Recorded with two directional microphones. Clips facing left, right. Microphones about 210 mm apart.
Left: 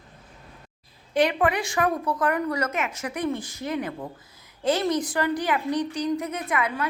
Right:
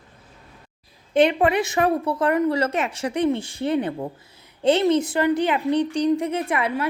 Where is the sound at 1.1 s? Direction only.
25° right (ahead or behind).